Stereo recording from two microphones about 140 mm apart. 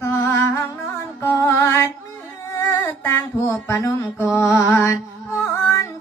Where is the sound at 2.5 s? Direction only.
20° left (ahead or behind).